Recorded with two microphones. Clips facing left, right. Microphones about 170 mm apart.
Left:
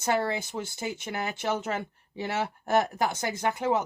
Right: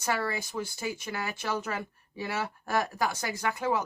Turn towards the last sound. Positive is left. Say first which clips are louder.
# left 3 dB
turn(degrees=25)  # may be behind; listen again after turning